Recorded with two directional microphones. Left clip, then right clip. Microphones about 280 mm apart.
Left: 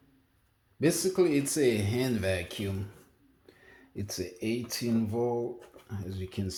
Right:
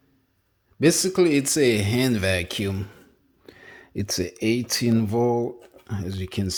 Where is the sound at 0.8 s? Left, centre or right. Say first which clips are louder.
Right 7 dB; right.